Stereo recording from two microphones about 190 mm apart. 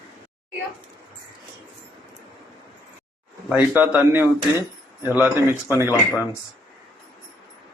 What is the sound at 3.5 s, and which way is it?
Speech, 10° right (ahead or behind).